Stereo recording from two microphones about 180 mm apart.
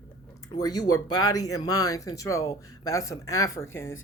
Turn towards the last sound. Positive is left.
turn(degrees=15)  # may be behind; listen again after turning